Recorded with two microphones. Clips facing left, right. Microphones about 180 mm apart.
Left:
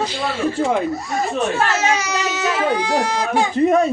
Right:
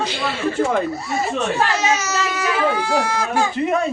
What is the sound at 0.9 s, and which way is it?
Speech, 5° right (ahead or behind).